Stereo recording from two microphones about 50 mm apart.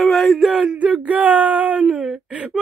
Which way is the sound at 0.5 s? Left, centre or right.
Centre.